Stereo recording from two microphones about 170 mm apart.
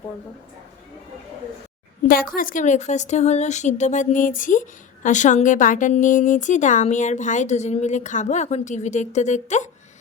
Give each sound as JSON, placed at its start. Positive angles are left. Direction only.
{"t": 2.0, "sound": "a woman's voice", "side_deg": 55}